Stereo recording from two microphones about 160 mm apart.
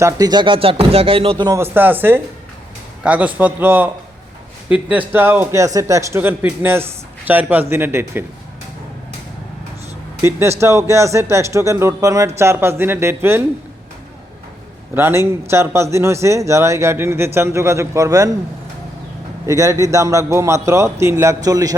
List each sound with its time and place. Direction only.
0.0 s speech: 25° right (ahead or behind)
1.5 s a man's voice: 15° right (ahead or behind)
10.2 s a man's voice: 15° right (ahead or behind)
14.9 s a man's voice: 15° right (ahead or behind)
19.5 s a man's voice: 20° right (ahead or behind)